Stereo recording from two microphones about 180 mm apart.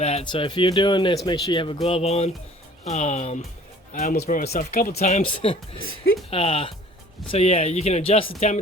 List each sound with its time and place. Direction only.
0.0 s speech: 35° left (ahead or behind); by 4.9 s 55° left (ahead or behind)
4.9 s speech: 40° left (ahead or behind)